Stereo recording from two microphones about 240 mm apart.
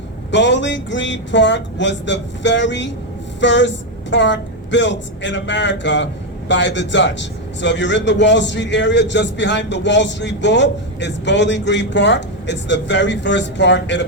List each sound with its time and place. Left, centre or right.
0.3 s a man's voice: left